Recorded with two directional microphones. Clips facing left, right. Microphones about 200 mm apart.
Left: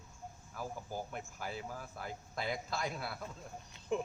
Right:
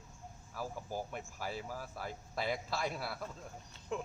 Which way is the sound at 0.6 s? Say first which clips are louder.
Right 1 dB; 5° right (ahead or behind).